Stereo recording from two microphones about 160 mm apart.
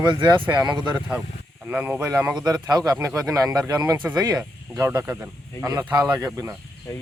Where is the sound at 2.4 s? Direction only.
25° right (ahead or behind).